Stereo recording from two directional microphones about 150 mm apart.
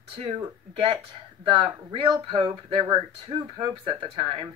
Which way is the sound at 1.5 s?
35° right (ahead or behind).